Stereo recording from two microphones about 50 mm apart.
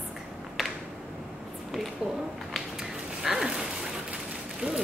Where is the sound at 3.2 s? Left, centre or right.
Centre.